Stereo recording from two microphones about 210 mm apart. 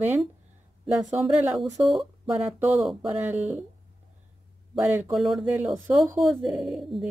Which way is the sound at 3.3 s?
35° right (ahead or behind).